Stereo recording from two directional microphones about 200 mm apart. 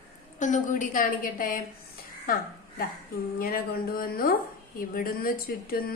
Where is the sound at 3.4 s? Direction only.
45° left (ahead or behind).